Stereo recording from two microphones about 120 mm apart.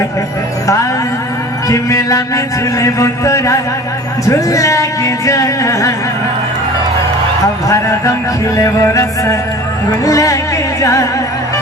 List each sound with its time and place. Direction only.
1.6 s a man's voice: 25° left (ahead or behind)
8.5 s a man's voice: 25° left (ahead or behind)
10.8 s music: 25° left (ahead or behind)